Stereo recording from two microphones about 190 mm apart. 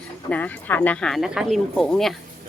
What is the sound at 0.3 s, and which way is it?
Speech, 10° left (ahead or behind).